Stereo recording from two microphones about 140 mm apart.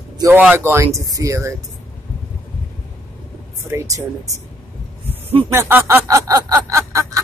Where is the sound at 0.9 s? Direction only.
25° right (ahead or behind).